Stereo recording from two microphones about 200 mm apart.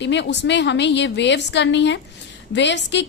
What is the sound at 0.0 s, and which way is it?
A woman's voice, 60° left (ahead or behind).